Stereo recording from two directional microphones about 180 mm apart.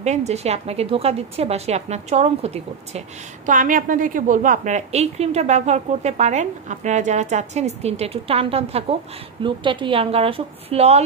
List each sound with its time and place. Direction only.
0.0 s a woman's voice: 40° right (ahead or behind)
3.4 s a woman's voice: 45° right (ahead or behind)